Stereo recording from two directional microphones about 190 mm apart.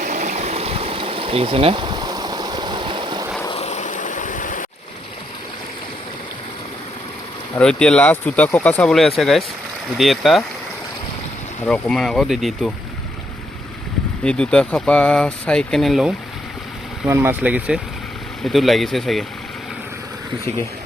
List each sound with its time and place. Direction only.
0.0 s stream: 40° right (ahead or behind); by 3.2 s 25° right (ahead or behind)
3.5 s vehicle: 35° left (ahead or behind)
7.6 s speech: 5° left (ahead or behind)
11.6 s speech: 5° left (ahead or behind)
14.3 s speech: 5° left (ahead or behind)
17.1 s speech: 10° right (ahead or behind)